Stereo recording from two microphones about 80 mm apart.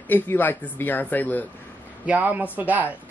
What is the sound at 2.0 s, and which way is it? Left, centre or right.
Speech, right.